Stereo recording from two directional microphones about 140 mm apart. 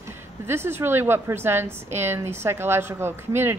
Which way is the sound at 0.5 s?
15° right (ahead or behind).